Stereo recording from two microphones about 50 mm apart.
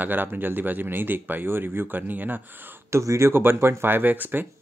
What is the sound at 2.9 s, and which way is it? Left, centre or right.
Speech, right.